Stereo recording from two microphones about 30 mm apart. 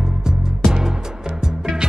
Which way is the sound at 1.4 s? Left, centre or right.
Right.